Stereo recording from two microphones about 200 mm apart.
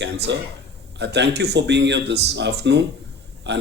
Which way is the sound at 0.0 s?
60° right (ahead or behind).